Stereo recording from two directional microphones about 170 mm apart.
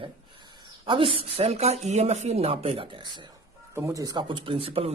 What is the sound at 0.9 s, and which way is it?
Speech, 30° right (ahead or behind).